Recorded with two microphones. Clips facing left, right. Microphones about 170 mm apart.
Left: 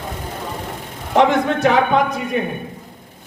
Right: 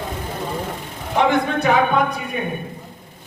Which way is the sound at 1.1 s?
90° left.